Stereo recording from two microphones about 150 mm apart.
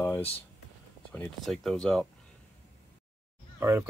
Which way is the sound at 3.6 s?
15° right (ahead or behind).